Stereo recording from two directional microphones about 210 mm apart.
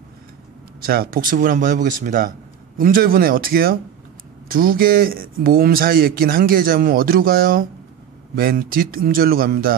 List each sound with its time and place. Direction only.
0.8 s speech: 45° right (ahead or behind)